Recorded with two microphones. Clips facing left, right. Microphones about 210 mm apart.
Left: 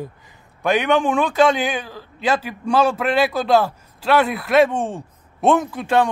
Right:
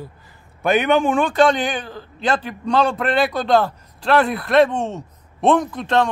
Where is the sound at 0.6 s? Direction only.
Centre (ahead or behind).